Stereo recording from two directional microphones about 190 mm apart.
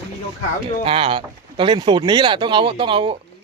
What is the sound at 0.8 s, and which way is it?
A man's voice, 30° right (ahead or behind).